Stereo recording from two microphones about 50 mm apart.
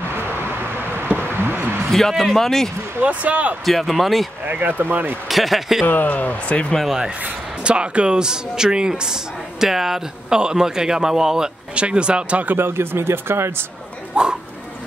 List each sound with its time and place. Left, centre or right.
0.1 s a sound: right
1.9 s speech: centre
3.0 s speech: right
3.6 s speech: centre
4.5 s speech: right
5.3 s speech: centre
5.9 s speech: left
7.6 s speech: right
11.7 s speech: right
12.5 s speech: right
14.2 s speech: centre